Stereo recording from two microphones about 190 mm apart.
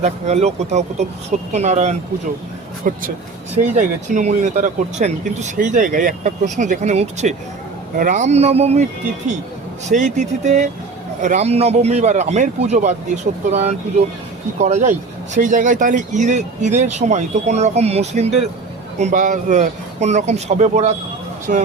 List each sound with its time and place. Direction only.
0.0 s speech: 35° right (ahead or behind)
2.8 s speech: 45° right (ahead or behind)
9.9 s speech: 40° right (ahead or behind)